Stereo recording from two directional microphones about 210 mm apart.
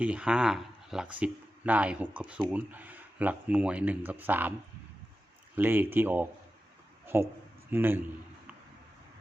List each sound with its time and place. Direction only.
0.0 s speech: 5° right (ahead or behind)
5.5 s speech: 10° right (ahead or behind)